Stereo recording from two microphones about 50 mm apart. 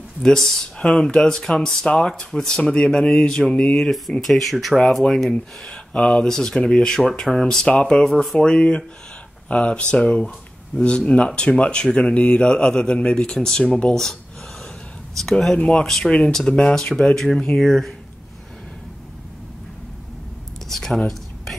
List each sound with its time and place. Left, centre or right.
0.2 s speech: centre
4.2 s speech: centre
5.7 s speech: left
6.2 s speech: centre
8.1 s speech: centre
8.4 s speech: centre
15.1 s speech: centre
20.6 s a sound: centre